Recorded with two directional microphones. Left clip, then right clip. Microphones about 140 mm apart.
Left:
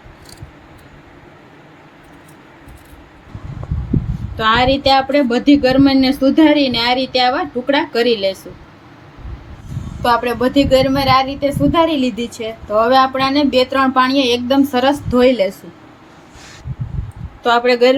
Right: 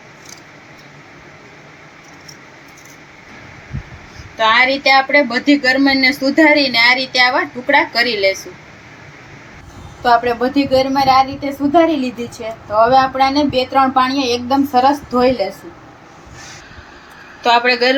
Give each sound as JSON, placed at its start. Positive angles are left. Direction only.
{"t": 4.4, "sound": "speech", "side_deg": 85}
{"t": 4.8, "sound": "speech", "side_deg": 15}
{"t": 5.6, "sound": "a woman's voice", "side_deg": 70}
{"t": 10.0, "sound": "a woman's voice", "side_deg": 90}
{"t": 17.4, "sound": "speech", "side_deg": 60}